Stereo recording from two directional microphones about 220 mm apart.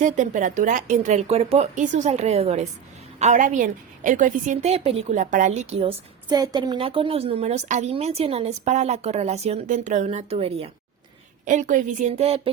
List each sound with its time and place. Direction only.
0.0 s a woman's voice: 35° right (ahead or behind)